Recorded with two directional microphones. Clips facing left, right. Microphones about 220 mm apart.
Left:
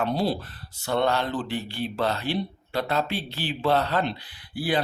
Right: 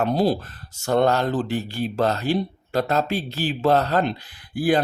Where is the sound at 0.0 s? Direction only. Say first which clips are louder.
Right 5 dB; 45° right (ahead or behind).